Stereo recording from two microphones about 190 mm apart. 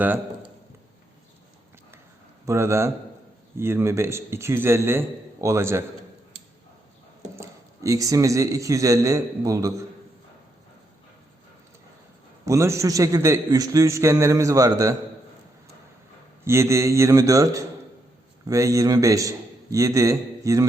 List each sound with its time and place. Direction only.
2.5 s a man's voice: 15° right (ahead or behind)
7.3 s a man's voice: 15° right (ahead or behind)
12.5 s a man's voice: 15° right (ahead or behind)
16.4 s a man's voice: 15° right (ahead or behind)